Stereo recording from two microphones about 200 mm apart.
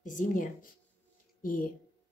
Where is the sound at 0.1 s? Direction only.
40° left (ahead or behind).